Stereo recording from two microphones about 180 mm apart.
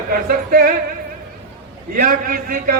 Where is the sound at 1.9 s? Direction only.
50° right (ahead or behind).